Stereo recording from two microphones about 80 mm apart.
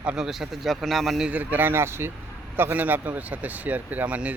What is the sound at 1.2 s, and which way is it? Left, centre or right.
Speech, right.